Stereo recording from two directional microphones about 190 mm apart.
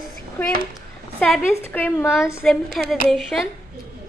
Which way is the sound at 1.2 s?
Centre (ahead or behind).